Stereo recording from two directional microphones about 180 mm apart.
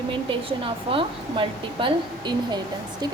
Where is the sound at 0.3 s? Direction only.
30° right (ahead or behind).